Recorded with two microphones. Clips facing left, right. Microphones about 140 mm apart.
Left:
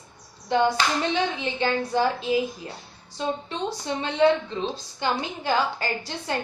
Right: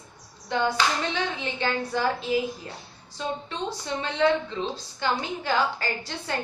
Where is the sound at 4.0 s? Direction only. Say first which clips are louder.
Left 3 dB; 20° left (ahead or behind).